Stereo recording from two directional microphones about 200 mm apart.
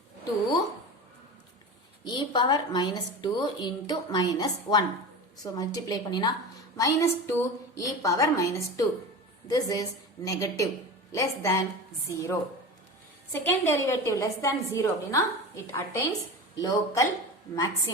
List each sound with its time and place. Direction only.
2.0 s a woman's voice: 20° left (ahead or behind)